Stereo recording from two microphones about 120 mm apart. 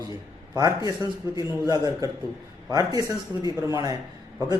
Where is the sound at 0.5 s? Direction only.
30° right (ahead or behind).